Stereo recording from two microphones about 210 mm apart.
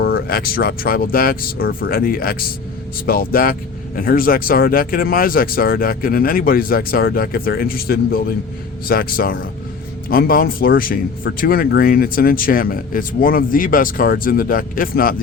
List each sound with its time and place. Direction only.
0.0 s speech: 45° left (ahead or behind)